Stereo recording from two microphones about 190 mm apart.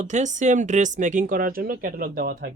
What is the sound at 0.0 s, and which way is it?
Speech, 40° right (ahead or behind).